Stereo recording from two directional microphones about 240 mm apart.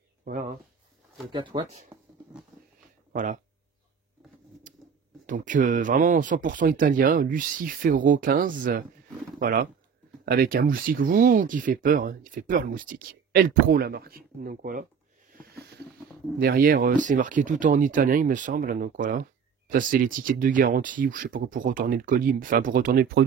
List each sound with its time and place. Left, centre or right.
0.2 s speech: right
1.3 s speech: centre
4.7 s a sound: right
5.2 s speech: right
16.3 s speech: right